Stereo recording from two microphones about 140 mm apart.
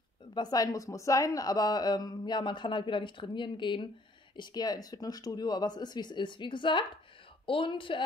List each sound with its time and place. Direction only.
0.3 s speech: 30° left (ahead or behind)